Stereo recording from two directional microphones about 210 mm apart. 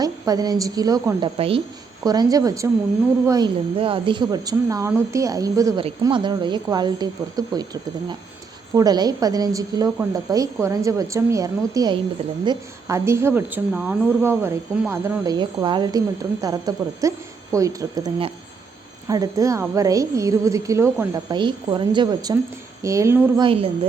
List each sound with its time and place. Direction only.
0.0 s a woman's voice: 15° right (ahead or behind)